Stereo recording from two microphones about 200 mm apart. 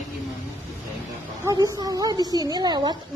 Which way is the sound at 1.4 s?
15° right (ahead or behind).